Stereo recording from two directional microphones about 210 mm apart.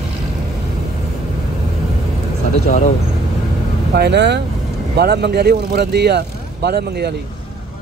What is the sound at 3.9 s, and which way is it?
Speech, 55° right (ahead or behind).